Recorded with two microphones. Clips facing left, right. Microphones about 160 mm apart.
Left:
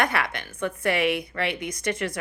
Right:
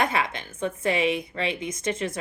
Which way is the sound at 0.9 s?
65° left (ahead or behind).